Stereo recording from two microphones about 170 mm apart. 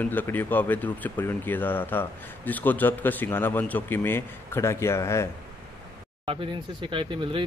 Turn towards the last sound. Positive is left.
turn(degrees=-30)  # may be behind; listen again after turning